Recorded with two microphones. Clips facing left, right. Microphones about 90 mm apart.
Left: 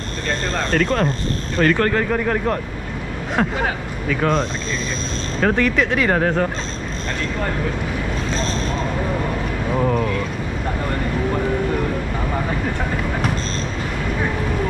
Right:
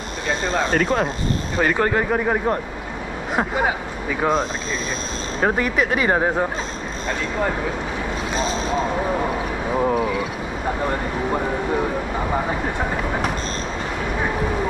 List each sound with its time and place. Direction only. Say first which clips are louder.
0.3 s speech: right 1 dB; 10° right (ahead or behind)
5.4 s speech: left 2 dB; 10° right (ahead or behind)
8.3 s speech: right 3 dB; 10° right (ahead or behind)